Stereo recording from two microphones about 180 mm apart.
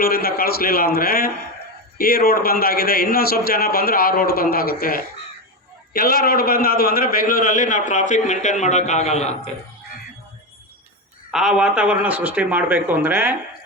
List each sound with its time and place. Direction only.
0.0 s a man's voice: 55° left (ahead or behind); by 9.5 s 40° left (ahead or behind)
11.3 s speech: 5° right (ahead or behind)